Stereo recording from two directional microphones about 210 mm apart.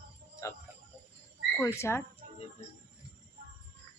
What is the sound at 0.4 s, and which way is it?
Music, 15° left (ahead or behind).